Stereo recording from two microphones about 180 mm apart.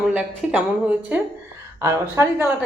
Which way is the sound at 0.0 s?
5° right (ahead or behind).